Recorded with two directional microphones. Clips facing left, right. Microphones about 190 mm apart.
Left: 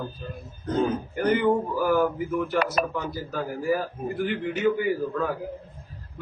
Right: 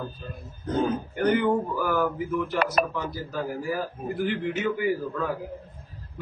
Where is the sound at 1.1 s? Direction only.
Centre (ahead or behind).